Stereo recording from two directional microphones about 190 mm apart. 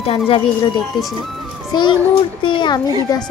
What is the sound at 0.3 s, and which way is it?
Speech, 25° left (ahead or behind).